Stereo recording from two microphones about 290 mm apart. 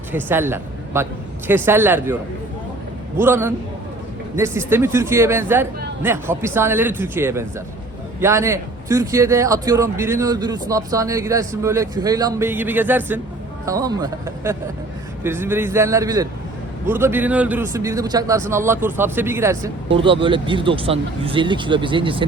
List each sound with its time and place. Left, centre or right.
0.1 s a man's voice: centre
3.2 s a man's voice: centre